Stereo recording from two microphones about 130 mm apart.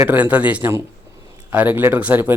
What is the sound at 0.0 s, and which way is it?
Speech, 15° right (ahead or behind).